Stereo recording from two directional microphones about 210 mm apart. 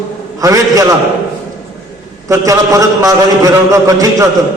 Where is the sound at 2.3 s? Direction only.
15° right (ahead or behind).